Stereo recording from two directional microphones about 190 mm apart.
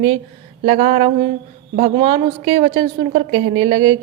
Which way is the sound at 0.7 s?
35° right (ahead or behind).